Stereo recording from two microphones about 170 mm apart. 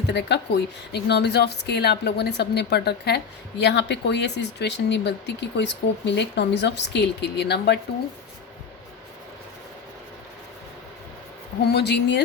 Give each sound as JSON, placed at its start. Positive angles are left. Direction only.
{"t": 0.1, "sound": "a woman's voice", "side_deg": 90}
{"t": 3.6, "sound": "speech", "side_deg": 90}
{"t": 11.6, "sound": "speech", "side_deg": 75}